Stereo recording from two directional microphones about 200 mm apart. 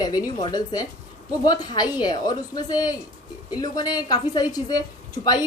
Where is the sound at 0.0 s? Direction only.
20° left (ahead or behind).